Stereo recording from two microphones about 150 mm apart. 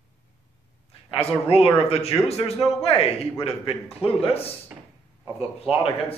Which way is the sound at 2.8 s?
40° left (ahead or behind).